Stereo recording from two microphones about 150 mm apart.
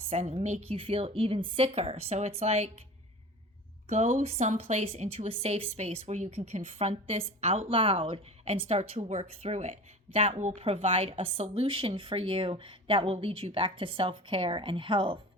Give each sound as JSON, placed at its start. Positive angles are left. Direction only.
{"t": 0.1, "sound": "a woman's voice", "side_deg": -50}
{"t": 3.8, "sound": "a woman's voice", "side_deg": -50}